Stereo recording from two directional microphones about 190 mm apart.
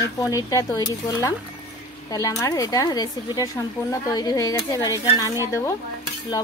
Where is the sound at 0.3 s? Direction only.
15° left (ahead or behind).